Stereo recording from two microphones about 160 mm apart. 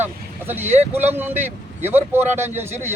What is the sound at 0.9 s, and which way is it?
Speech, 10° right (ahead or behind).